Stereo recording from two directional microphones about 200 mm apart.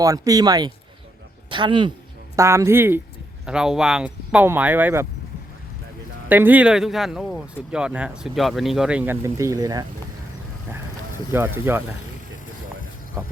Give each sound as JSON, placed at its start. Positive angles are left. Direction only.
{"t": 0.0, "sound": "speech", "side_deg": -15}
{"t": 6.2, "sound": "speech", "side_deg": -10}
{"t": 11.3, "sound": "speech", "side_deg": -10}